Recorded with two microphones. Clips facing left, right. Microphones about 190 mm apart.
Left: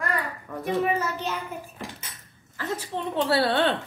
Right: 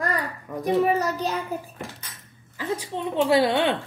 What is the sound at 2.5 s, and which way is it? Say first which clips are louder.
A woman's voice: right 2 dB; 15° right (ahead or behind).